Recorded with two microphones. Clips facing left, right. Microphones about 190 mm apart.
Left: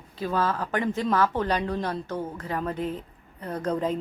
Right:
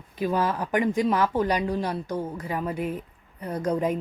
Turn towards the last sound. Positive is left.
turn(degrees=-10)  # may be behind; listen again after turning